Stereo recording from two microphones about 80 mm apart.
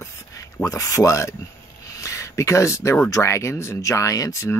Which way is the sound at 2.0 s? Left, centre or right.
Left.